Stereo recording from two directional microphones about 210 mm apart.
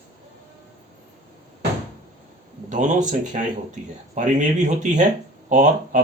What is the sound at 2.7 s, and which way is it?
Speech, 35° right (ahead or behind).